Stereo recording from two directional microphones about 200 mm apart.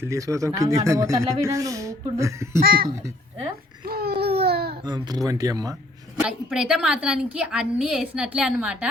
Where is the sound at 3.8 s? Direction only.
50° right (ahead or behind).